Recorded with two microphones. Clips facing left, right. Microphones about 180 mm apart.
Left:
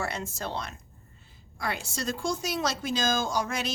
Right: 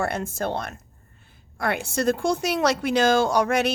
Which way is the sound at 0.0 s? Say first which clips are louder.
Right 7 dB; 55° right (ahead or behind).